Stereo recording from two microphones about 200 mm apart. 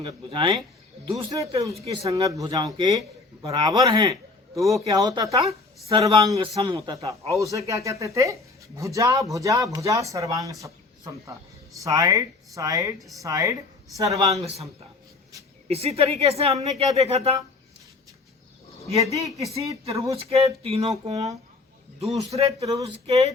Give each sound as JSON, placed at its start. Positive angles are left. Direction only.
{"t": 0.0, "sound": "a man's voice", "side_deg": -25}
{"t": 13.0, "sound": "speech", "side_deg": 0}
{"t": 13.2, "sound": "speech", "side_deg": -15}
{"t": 14.3, "sound": "speech", "side_deg": -30}
{"t": 19.1, "sound": "speech", "side_deg": -15}
{"t": 20.3, "sound": "speech", "side_deg": -30}